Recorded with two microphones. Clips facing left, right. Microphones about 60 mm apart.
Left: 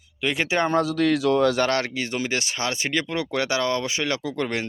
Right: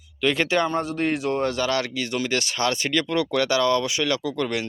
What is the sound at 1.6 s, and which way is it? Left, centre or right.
Speech, left.